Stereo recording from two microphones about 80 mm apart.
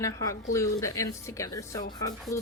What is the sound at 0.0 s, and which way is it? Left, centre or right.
Speech, left.